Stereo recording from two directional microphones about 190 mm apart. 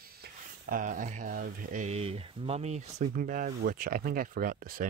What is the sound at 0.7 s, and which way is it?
Speech, 45° right (ahead or behind).